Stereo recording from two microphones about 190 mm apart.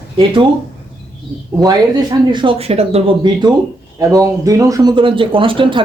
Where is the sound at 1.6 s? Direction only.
20° right (ahead or behind).